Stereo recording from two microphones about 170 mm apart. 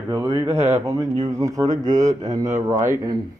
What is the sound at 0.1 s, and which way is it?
Speech, 20° right (ahead or behind).